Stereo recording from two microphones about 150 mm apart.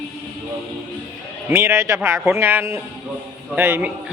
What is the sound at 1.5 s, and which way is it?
A man's voice, 20° right (ahead or behind).